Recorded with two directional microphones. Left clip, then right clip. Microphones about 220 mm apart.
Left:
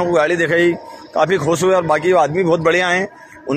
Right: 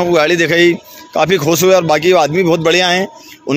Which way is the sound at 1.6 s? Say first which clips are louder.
Right 6 dB; 50° right (ahead or behind).